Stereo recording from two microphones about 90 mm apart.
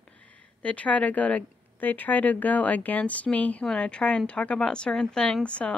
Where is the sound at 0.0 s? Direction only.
15° left (ahead or behind).